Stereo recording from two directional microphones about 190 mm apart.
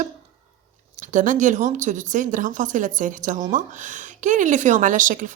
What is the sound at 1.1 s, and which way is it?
Speech, 40° right (ahead or behind).